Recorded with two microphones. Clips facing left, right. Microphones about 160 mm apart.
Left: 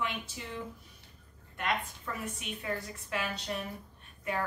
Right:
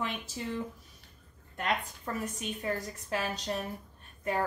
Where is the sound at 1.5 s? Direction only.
40° right (ahead or behind).